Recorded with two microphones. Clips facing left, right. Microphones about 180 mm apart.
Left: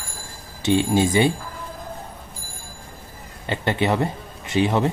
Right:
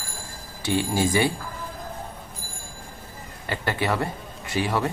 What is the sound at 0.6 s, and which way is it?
Speech, 25° left (ahead or behind).